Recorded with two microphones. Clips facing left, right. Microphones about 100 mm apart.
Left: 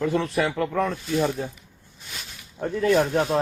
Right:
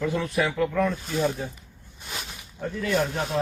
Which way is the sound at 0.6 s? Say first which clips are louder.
Even; 40° left (ahead or behind).